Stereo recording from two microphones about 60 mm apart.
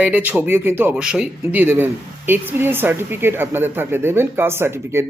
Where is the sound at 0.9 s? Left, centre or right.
Centre.